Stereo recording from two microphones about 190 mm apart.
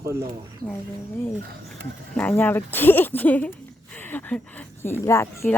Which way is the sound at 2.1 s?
5° left (ahead or behind).